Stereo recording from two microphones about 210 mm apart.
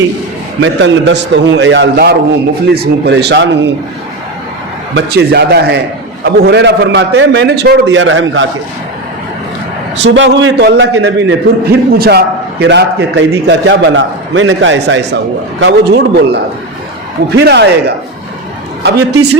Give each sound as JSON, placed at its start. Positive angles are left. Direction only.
{"t": 0.6, "sound": "a man's voice", "side_deg": -60}
{"t": 4.9, "sound": "a man's voice", "side_deg": -50}
{"t": 10.0, "sound": "a man's voice", "side_deg": -60}